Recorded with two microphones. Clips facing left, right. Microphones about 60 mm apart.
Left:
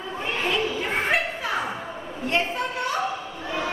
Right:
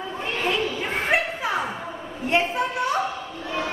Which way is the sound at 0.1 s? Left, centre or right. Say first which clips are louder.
Even; centre.